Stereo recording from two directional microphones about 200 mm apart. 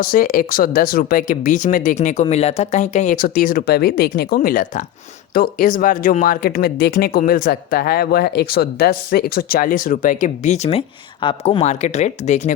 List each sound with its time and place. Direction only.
0.0 s speech: 45° left (ahead or behind)